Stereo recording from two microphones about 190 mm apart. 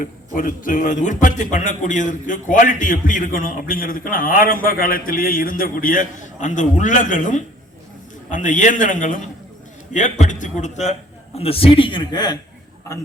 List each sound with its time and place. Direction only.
0.0 s a man's voice: 45° left (ahead or behind); by 12.4 s 20° left (ahead or behind)